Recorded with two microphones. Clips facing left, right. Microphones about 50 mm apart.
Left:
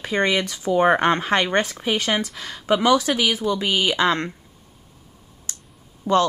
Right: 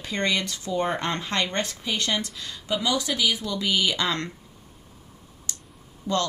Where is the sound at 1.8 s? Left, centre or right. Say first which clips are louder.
Left 5 dB; left.